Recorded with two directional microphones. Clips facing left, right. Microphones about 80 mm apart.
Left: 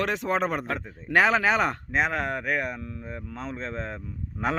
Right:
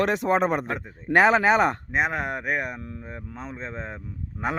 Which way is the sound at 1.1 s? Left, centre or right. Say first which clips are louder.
Right 3 dB; right.